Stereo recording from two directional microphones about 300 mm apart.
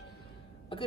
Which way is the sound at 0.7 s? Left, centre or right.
Centre.